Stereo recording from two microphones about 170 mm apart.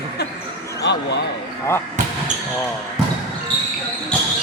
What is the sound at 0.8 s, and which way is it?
Speech, 85° left.